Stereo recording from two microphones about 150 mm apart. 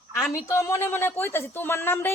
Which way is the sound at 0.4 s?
20° left (ahead or behind).